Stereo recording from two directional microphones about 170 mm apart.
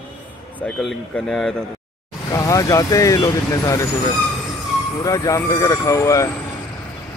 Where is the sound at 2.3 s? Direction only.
20° left (ahead or behind).